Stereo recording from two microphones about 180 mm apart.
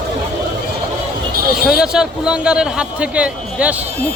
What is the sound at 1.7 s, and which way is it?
A man's voice, 5° right (ahead or behind).